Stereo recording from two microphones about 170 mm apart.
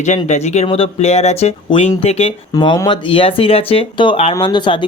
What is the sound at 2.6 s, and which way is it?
Speech, 25° left (ahead or behind).